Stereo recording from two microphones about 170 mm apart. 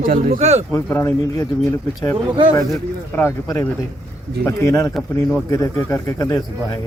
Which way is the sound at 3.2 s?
15° left (ahead or behind).